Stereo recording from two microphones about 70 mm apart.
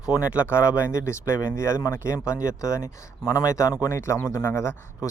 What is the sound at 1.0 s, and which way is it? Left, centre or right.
Speech, left.